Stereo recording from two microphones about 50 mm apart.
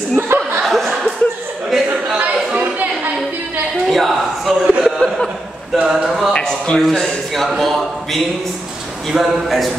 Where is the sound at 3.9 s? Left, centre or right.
Centre.